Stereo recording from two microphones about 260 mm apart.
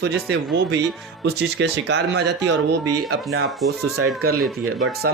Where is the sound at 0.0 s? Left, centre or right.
Right.